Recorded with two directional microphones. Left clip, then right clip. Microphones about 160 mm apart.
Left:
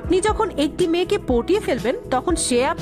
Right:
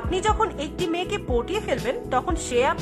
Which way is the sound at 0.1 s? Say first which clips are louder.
Left 4 dB; 35° left (ahead or behind).